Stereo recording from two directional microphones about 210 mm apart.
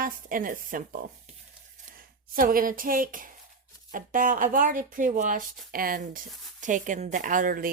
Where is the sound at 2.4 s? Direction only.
40° right (ahead or behind).